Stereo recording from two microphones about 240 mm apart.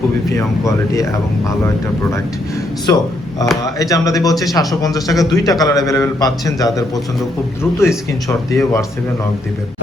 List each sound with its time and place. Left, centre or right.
0.3 s speech: centre
5.1 s a man's voice: centre
5.5 s speech: centre